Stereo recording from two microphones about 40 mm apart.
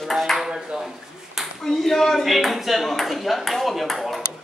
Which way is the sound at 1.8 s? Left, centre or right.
Centre.